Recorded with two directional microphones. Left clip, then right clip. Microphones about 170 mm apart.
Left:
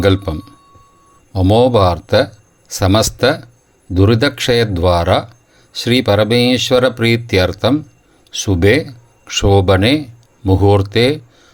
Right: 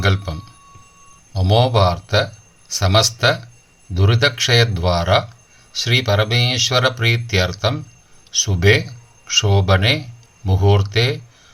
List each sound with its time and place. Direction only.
0.0 s speech: 45° left (ahead or behind)